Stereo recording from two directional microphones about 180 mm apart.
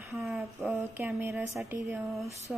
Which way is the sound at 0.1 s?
Centre (ahead or behind).